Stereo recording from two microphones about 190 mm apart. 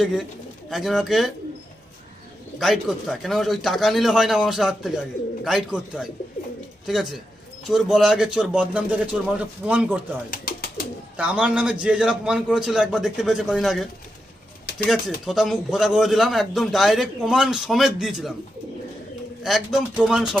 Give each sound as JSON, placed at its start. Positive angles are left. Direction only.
{"t": 0.0, "sound": "a man's voice", "side_deg": 0}
{"t": 2.6, "sound": "a man's voice", "side_deg": 0}
{"t": 10.3, "sound": "bird", "side_deg": 50}
{"t": 11.2, "sound": "a man's voice", "side_deg": -5}
{"t": 14.7, "sound": "pigeon", "side_deg": 55}
{"t": 15.3, "sound": "a man's voice", "side_deg": 0}
{"t": 19.4, "sound": "a man's voice", "side_deg": 0}